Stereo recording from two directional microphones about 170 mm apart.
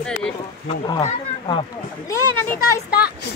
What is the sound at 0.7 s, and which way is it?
Speech, 25° left (ahead or behind).